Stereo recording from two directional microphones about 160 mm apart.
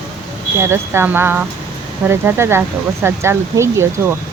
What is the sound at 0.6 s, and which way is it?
Speech, 15° right (ahead or behind).